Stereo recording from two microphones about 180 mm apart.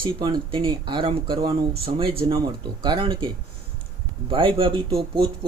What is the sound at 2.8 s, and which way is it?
Speech, 25° right (ahead or behind).